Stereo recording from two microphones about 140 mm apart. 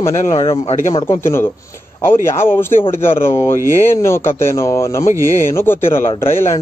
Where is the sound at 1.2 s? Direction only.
15° left (ahead or behind).